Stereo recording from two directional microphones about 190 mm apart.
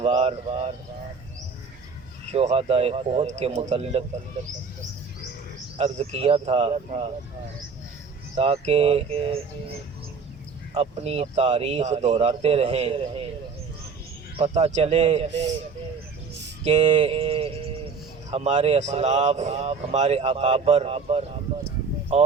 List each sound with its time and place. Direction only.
0.0 s speech: 30° right (ahead or behind)
2.3 s speech: 35° right (ahead or behind)
5.7 s speech: 35° right (ahead or behind)
8.4 s speech: 30° right (ahead or behind)
10.8 s speech: 35° right (ahead or behind)
14.3 s speech: 35° right (ahead or behind)
16.6 s speech: 35° right (ahead or behind)